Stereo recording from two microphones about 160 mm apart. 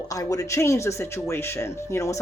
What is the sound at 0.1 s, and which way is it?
Speech, 20° left (ahead or behind).